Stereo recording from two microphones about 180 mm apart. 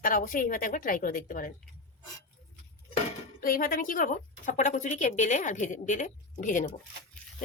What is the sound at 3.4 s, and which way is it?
A woman's voice, 50° left (ahead or behind).